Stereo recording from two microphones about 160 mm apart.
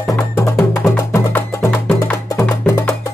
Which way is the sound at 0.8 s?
Centre (ahead or behind).